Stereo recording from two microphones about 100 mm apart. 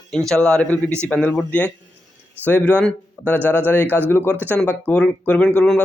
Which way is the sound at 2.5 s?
15° left (ahead or behind).